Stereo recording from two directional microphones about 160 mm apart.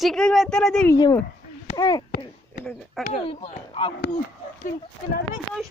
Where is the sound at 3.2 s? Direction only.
35° left (ahead or behind).